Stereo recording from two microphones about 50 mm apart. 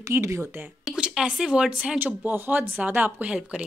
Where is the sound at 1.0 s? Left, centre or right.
Centre.